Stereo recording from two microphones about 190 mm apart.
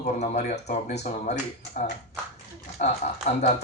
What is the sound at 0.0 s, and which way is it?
Speech, 35° left (ahead or behind).